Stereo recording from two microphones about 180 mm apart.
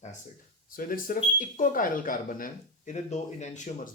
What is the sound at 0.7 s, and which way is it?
Speech, 50° left (ahead or behind).